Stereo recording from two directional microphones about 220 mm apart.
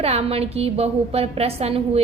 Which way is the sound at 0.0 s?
30° right (ahead or behind).